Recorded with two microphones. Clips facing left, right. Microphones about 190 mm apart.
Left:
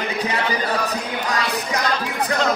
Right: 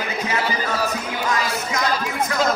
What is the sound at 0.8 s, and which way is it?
Music, 35° left (ahead or behind).